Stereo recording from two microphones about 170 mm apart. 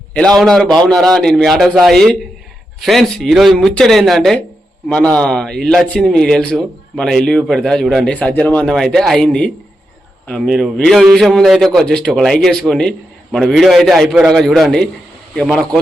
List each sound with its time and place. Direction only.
0.1 s a man's voice: 5° left (ahead or behind)